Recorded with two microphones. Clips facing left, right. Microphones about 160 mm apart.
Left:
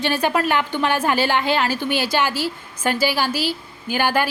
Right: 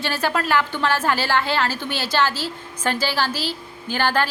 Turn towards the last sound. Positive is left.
turn(degrees=10)  # may be behind; listen again after turning